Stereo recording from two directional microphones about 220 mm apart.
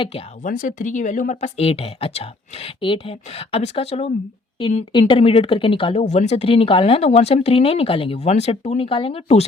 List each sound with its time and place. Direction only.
0.4 s speech: 35° left (ahead or behind)